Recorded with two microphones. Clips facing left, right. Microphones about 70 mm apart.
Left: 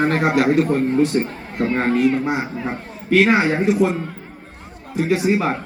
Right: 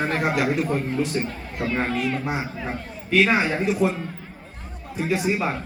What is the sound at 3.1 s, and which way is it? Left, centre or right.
Speech, left.